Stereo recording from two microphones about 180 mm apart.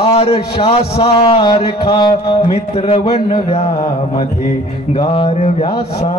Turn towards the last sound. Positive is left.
turn(degrees=35)  # may be behind; listen again after turning